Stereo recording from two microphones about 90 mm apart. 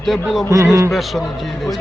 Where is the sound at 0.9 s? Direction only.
Centre (ahead or behind).